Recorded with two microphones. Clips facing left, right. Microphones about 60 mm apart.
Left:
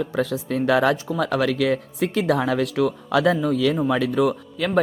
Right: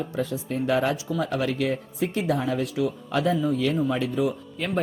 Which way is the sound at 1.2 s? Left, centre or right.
Left.